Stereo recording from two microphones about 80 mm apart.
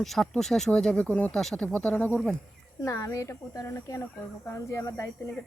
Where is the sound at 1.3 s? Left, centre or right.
Centre.